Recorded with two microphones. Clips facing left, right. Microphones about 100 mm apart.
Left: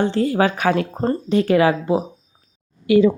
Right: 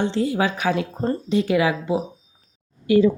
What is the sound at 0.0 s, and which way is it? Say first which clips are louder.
A woman's voice: left 4 dB; 50° left (ahead or behind).